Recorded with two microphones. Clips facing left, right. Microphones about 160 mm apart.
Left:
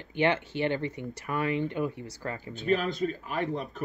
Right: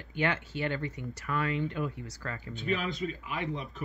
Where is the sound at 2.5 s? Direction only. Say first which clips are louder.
Left 5 dB; 40° left (ahead or behind).